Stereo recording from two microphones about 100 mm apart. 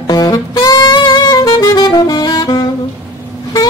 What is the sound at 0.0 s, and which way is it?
Saxophone, 45° left (ahead or behind).